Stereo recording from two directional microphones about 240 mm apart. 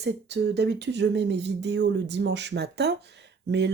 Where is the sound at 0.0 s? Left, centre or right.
Right.